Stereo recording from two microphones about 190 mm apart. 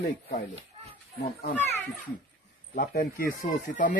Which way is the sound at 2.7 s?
50° left (ahead or behind).